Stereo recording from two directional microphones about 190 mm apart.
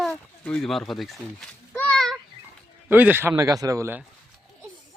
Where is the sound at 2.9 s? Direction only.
10° right (ahead or behind).